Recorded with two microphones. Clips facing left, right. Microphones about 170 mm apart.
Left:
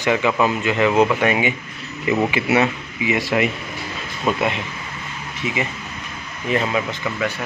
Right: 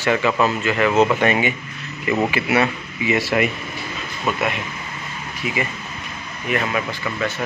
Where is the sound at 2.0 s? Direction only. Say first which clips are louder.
Left 1 dB; 20° left (ahead or behind).